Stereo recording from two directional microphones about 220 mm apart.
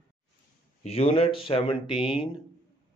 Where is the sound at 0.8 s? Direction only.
25° left (ahead or behind).